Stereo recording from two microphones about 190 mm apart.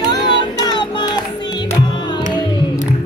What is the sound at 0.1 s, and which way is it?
Music, 25° left (ahead or behind).